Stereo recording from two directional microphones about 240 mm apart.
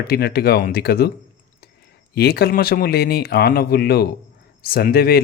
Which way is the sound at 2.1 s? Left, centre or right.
Left.